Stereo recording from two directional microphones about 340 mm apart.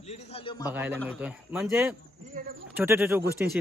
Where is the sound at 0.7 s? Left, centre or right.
Centre.